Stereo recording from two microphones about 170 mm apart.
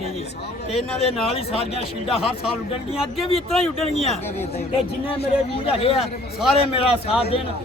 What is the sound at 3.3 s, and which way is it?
Speech, centre (ahead or behind).